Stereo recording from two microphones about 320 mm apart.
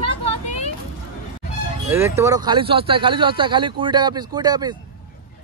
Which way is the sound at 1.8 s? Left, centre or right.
Centre.